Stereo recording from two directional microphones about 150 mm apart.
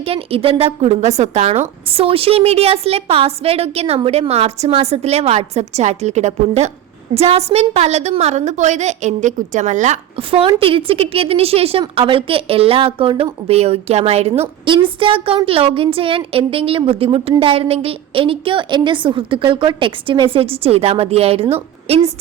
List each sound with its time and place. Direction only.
0.0 s a woman's voice: 40° right (ahead or behind)
10.2 s a woman's voice: 35° right (ahead or behind)